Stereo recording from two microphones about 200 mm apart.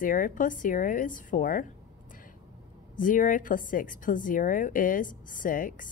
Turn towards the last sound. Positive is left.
turn(degrees=45)  # may be behind; listen again after turning